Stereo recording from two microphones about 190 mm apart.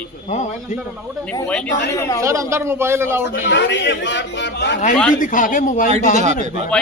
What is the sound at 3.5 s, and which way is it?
A man's voice, 70° left (ahead or behind).